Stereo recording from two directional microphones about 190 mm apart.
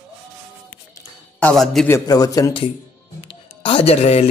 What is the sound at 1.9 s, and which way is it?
Speech, 20° left (ahead or behind).